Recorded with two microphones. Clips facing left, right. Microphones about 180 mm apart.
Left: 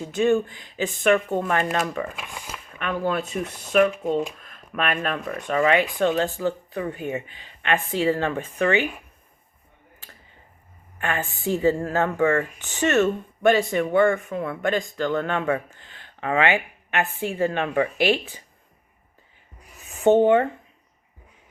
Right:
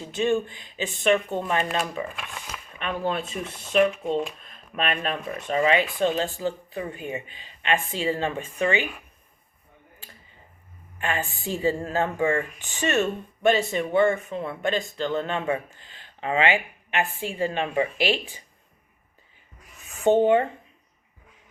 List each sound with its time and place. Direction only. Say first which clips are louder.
0.1 s speech: left 3 dB; 20° right (ahead or behind)
2.1 s speech: left 1 dB; 15° left (ahead or behind)
2.7 s speech: left 2 dB; 25° right (ahead or behind)
6.0 s speech: left 2 dB; 60° left (ahead or behind)
6.4 s speech: left 3 dB; 20° right (ahead or behind)
10.9 s a woman's voice: left 1 dB; 15° right (ahead or behind)
17.9 s speech: left 4 dB; 20° left (ahead or behind)
19.9 s a sound: left 3 dB; 20° left (ahead or behind)
20.2 s speech: left 2 dB; 15° right (ahead or behind)